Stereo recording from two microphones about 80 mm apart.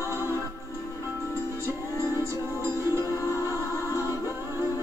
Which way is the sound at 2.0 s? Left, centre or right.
Left.